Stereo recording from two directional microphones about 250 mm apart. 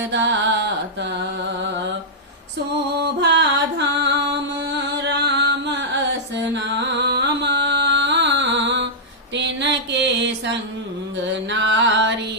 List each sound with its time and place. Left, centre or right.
0.0 s music: right
3.0 s music: right
9.3 s a sound: right
11.2 s music: right